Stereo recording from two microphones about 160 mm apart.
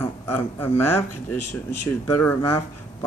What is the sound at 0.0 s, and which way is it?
Speech, 15° left (ahead or behind).